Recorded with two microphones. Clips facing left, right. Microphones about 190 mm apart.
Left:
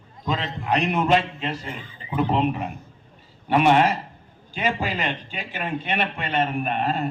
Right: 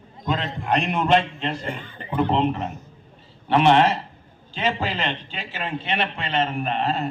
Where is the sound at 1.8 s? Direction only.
60° right (ahead or behind).